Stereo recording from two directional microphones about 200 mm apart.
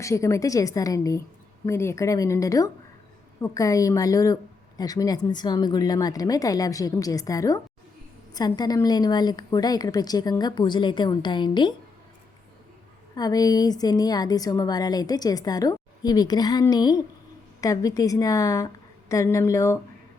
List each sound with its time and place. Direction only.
0.0 s a woman's voice: 15° left (ahead or behind)
13.1 s a woman's voice: 20° left (ahead or behind)